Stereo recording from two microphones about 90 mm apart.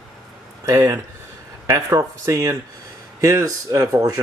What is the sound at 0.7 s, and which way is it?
Speech, 35° right (ahead or behind).